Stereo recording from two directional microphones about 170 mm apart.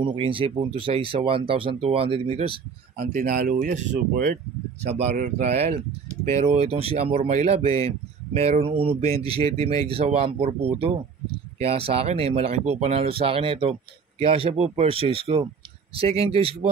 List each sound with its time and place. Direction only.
0.0 s speech: 30° right (ahead or behind)
3.1 s speech: 60° right (ahead or behind)
3.7 s speech: 50° right (ahead or behind)